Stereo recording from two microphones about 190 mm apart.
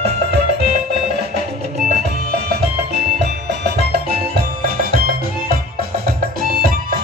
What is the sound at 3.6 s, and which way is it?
Music, 60° right (ahead or behind).